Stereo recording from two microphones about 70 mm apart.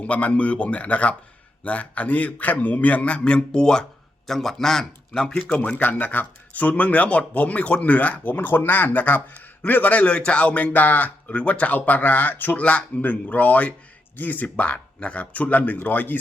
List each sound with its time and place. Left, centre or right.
0.0 s speech: centre